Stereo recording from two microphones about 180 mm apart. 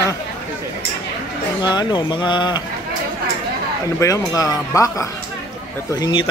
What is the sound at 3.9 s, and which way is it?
Speech, 20° left (ahead or behind).